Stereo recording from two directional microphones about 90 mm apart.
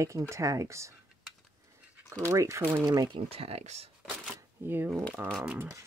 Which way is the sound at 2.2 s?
35° right (ahead or behind).